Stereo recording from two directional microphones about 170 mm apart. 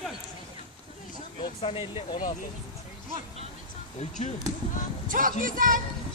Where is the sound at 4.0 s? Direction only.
40° left (ahead or behind).